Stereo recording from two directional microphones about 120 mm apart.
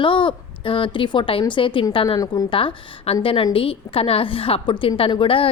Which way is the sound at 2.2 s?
30° left (ahead or behind).